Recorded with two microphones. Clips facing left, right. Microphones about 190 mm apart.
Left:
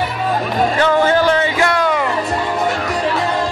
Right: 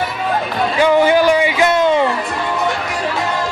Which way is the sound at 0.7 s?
15° right (ahead or behind).